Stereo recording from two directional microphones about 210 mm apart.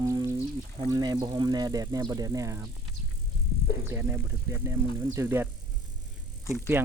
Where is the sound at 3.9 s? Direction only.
10° right (ahead or behind).